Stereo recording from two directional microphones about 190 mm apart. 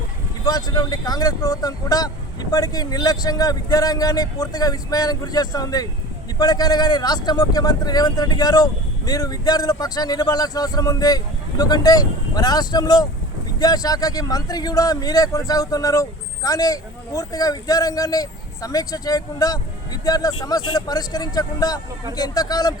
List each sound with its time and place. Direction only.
0.4 s speech: 20° left (ahead or behind)